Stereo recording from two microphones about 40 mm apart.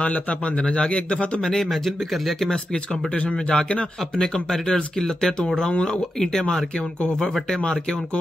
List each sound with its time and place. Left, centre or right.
0.0 s a man's voice: left
1.4 s speech: centre
1.7 s speech: centre
3.2 s a man's voice: left
6.1 s speech: centre